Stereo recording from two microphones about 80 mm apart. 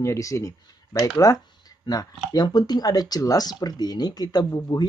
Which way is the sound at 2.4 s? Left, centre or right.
Left.